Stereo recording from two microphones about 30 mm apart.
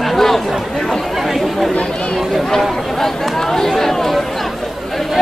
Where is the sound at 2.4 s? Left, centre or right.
Centre.